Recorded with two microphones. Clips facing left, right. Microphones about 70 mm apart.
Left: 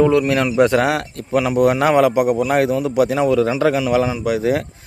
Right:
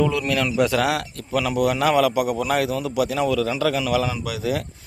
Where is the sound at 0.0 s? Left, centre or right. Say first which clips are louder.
Left 7 dB; left.